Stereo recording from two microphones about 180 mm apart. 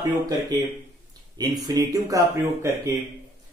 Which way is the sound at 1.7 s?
20° right (ahead or behind).